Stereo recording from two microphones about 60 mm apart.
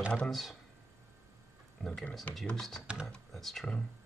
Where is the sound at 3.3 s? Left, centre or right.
Centre.